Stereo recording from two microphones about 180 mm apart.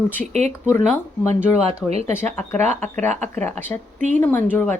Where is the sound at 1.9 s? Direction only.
35° right (ahead or behind).